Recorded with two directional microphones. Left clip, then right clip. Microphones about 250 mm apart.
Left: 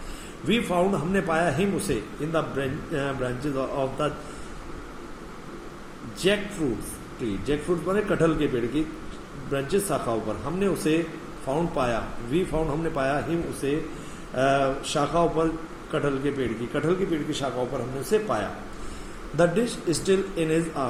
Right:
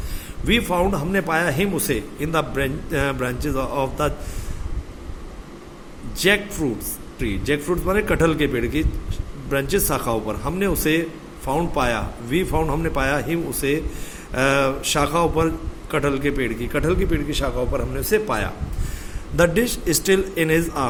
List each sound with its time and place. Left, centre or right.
0.4 s a man's voice: right
6.1 s a man's voice: right
14.3 s a man's voice: right